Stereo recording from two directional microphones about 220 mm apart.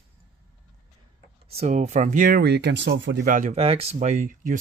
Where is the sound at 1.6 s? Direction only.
30° right (ahead or behind); by 3.3 s 55° right (ahead or behind).